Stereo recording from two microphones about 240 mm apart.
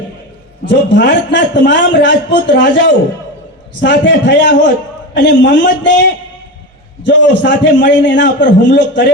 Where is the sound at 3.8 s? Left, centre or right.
Left.